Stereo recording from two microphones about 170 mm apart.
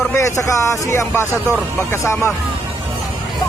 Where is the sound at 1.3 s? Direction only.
15° right (ahead or behind).